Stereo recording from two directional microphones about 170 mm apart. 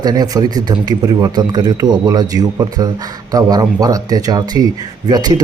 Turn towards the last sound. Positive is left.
turn(degrees=-25)  # may be behind; listen again after turning